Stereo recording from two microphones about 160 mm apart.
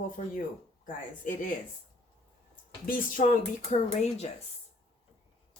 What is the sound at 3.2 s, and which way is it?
Speech, 55° left (ahead or behind).